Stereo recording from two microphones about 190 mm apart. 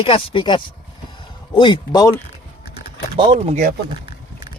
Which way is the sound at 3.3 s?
35° right (ahead or behind).